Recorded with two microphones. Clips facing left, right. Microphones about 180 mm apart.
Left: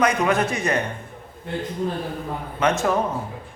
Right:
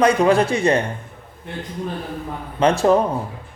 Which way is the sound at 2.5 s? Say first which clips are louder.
Right 6 dB; 30° right (ahead or behind).